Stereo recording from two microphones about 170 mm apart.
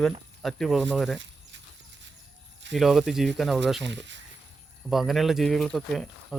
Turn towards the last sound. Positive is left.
turn(degrees=0)  # may be behind; listen again after turning